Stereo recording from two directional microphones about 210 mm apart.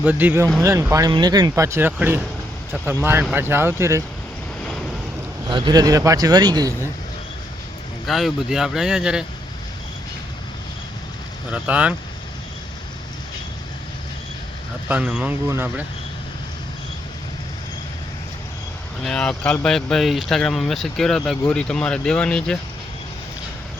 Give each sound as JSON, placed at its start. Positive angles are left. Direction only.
{"t": 0.0, "sound": "speech", "side_deg": -10}
{"t": 5.5, "sound": "speech", "side_deg": -20}
{"t": 8.0, "sound": "speech", "side_deg": 0}
{"t": 11.5, "sound": "speech", "side_deg": -5}
{"t": 14.8, "sound": "speech", "side_deg": -5}
{"t": 19.0, "sound": "speech", "side_deg": 5}